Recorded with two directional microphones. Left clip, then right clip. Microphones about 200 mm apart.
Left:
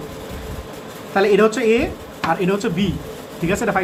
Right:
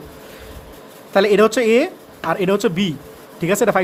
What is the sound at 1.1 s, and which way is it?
Speech, 55° right (ahead or behind).